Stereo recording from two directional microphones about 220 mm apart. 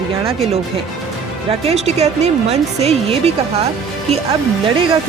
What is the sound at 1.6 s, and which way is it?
A woman's voice, 30° right (ahead or behind).